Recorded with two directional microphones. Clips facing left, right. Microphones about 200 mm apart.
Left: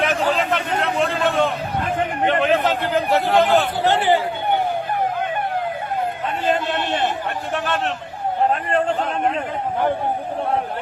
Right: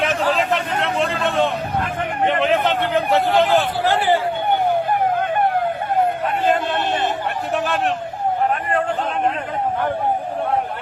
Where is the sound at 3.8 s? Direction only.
20° left (ahead or behind).